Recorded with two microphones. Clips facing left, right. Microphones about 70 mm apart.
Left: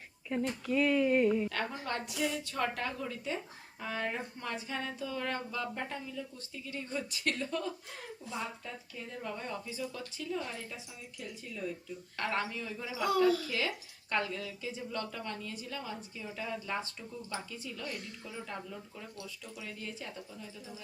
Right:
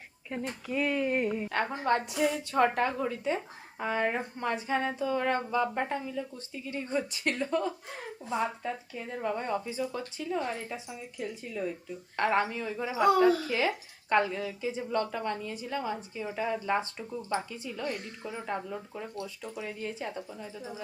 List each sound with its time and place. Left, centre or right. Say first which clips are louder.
0.3 s speech: left 2 dB; centre
0.7 s a woman's voice: left 1 dB; centre; by 20.8 s right